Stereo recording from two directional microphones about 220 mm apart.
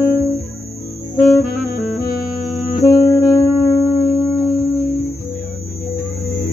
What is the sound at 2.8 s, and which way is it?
Music, 15° left (ahead or behind).